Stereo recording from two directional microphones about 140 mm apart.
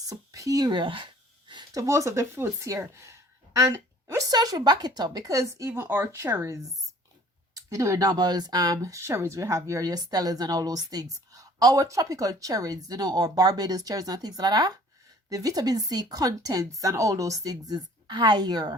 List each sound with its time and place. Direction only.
0.0 s speech: 25° right (ahead or behind)
7.7 s speech: 25° right (ahead or behind)